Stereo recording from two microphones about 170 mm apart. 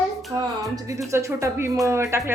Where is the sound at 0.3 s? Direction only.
20° right (ahead or behind).